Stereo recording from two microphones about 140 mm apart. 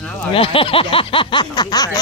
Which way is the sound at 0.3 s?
40° left (ahead or behind).